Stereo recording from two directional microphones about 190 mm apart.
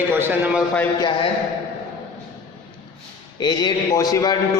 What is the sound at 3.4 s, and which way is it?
Speech, 20° left (ahead or behind).